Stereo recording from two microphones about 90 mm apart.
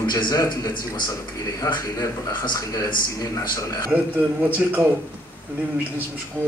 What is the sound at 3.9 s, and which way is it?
A man's voice, 15° right (ahead or behind).